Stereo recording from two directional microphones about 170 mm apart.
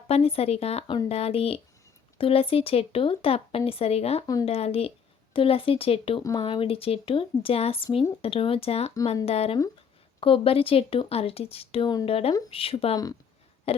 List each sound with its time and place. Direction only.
0.1 s speech: 35° left (ahead or behind)